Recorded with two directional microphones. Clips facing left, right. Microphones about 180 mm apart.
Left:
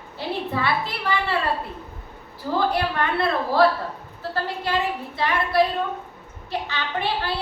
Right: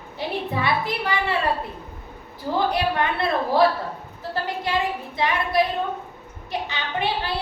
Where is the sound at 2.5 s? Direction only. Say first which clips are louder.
Even; 20° right (ahead or behind).